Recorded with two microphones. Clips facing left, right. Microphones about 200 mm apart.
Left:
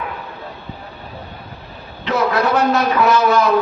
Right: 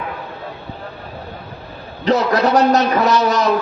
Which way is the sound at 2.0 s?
40° right (ahead or behind).